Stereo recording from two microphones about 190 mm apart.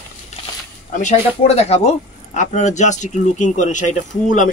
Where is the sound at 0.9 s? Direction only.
35° left (ahead or behind).